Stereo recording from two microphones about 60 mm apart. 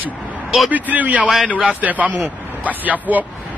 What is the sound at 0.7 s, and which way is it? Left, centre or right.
A man's voice, right.